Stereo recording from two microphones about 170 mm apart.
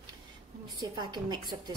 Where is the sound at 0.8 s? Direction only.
25° right (ahead or behind).